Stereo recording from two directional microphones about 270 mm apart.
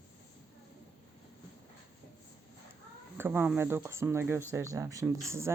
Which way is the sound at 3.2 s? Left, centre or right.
Centre.